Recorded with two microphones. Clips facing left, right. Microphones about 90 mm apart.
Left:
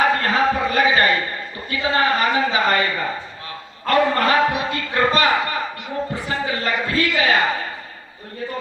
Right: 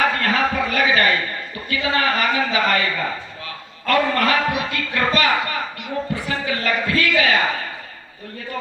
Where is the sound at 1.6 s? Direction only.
35° left (ahead or behind).